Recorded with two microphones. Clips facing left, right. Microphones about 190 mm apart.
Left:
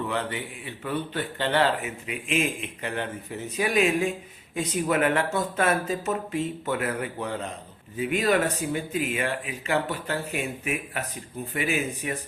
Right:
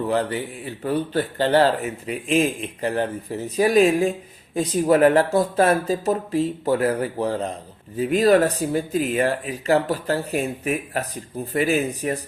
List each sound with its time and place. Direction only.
0.1 s speech: 40° right (ahead or behind)